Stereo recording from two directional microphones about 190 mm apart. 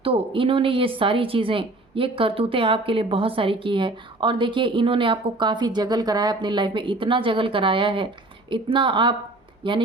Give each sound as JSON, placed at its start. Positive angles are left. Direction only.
{"t": 0.0, "sound": "speech", "side_deg": -30}